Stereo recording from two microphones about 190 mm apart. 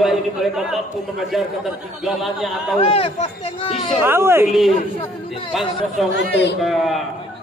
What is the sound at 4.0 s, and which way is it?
Speech, 10° right (ahead or behind).